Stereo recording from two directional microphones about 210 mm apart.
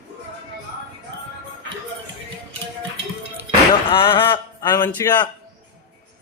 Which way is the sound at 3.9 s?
25° left (ahead or behind).